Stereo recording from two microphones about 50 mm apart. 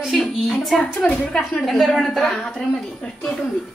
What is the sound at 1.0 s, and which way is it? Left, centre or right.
Speech, left.